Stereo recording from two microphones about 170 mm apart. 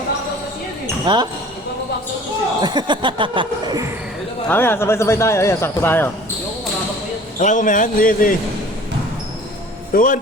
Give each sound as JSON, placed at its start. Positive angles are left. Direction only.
{"t": 1.0, "sound": "speech", "side_deg": -25}
{"t": 2.6, "sound": "speech", "side_deg": -25}
{"t": 4.4, "sound": "speech", "side_deg": 10}
{"t": 7.3, "sound": "a man's voice", "side_deg": 45}
{"t": 9.9, "sound": "a man's voice", "side_deg": 55}